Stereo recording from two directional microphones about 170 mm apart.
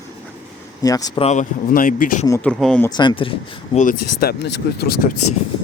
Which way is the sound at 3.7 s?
55° left (ahead or behind).